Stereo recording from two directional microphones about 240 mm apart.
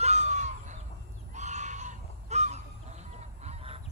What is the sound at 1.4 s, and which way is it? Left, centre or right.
Crow, right.